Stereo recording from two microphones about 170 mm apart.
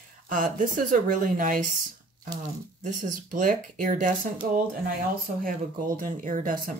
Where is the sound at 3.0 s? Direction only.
50° right (ahead or behind).